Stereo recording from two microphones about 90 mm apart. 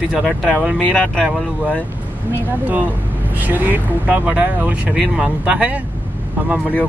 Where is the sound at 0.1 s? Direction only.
5° right (ahead or behind).